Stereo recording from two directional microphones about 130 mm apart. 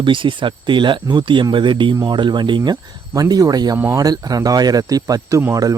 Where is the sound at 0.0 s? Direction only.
40° right (ahead or behind).